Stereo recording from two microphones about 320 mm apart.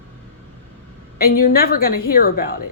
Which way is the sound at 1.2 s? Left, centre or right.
Left.